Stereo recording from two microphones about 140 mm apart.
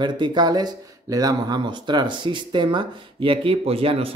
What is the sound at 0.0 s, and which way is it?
Speech, 30° right (ahead or behind).